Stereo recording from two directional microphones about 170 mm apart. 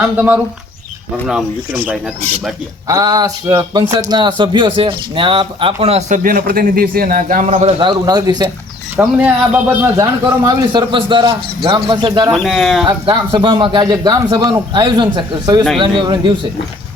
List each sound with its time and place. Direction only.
1.1 s speech: 5° right (ahead or behind)
2.8 s speech: 20° right (ahead or behind); by 6.1 s 35° right (ahead or behind)
6.2 s a man's voice: 55° right (ahead or behind)
7.5 s speech: 30° right (ahead or behind)
9.0 s speech: 10° right (ahead or behind); by 12.3 s 25° right (ahead or behind)
12.3 s speech: centre (ahead or behind)
12.9 s speech: 25° right (ahead or behind)